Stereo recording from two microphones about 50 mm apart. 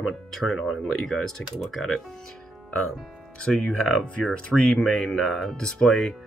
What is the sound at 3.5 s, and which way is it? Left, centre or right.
Speech, centre.